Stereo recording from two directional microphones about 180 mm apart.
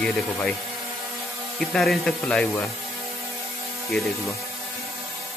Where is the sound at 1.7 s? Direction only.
Centre (ahead or behind).